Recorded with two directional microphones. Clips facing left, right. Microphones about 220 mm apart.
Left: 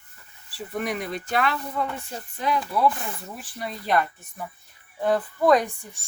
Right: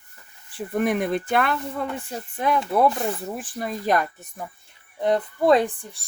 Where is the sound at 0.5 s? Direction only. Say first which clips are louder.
Right 6 dB; 50° right (ahead or behind).